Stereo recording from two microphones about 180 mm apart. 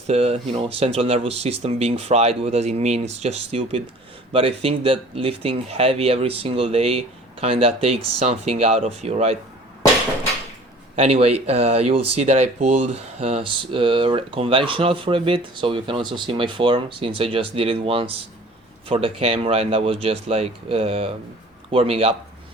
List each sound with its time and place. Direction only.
0.1 s speech: 35° right (ahead or behind)
10.9 s speech: 35° right (ahead or behind)